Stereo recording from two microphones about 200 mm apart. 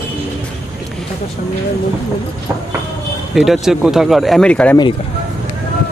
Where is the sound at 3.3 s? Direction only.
Centre (ahead or behind).